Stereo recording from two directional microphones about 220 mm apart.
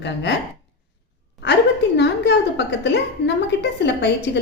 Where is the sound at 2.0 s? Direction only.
50° left (ahead or behind).